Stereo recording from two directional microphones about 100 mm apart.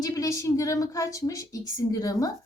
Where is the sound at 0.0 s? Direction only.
35° left (ahead or behind).